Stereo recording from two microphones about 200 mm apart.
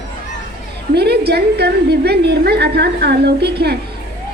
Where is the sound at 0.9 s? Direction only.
55° right (ahead or behind).